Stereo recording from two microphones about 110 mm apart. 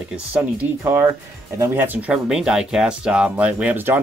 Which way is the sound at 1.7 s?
10° right (ahead or behind).